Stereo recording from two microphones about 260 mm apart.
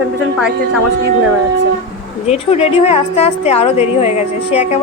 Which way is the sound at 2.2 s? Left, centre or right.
Left.